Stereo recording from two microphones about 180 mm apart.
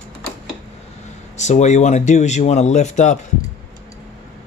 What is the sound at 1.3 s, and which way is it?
Speech, 40° left (ahead or behind).